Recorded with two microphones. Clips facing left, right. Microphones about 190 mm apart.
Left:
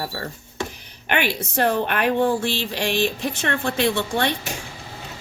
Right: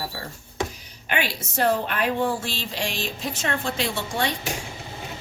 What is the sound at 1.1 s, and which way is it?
A woman's voice, 65° left (ahead or behind).